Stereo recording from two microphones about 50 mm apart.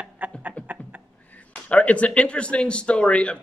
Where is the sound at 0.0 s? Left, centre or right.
Right.